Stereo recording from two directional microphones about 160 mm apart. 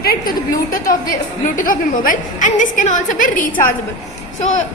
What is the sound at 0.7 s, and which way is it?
A woman's voice, 60° left (ahead or behind).